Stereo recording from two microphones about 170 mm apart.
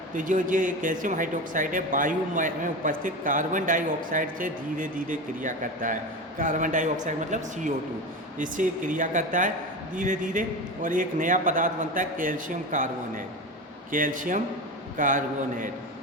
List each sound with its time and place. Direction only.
0.1 s speech: 50° right (ahead or behind)